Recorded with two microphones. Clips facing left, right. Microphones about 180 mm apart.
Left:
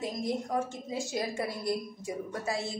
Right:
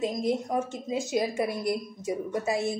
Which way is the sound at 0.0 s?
20° right (ahead or behind).